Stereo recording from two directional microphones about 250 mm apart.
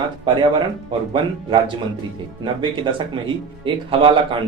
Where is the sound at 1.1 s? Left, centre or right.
Centre.